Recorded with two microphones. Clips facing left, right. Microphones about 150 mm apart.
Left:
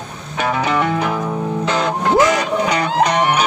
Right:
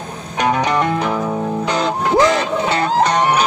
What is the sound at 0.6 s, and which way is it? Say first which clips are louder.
Music: even; 5° left (ahead or behind).